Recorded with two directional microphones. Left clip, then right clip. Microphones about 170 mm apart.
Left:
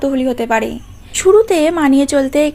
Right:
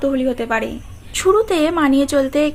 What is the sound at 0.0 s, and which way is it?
Speech, 30° left (ahead or behind).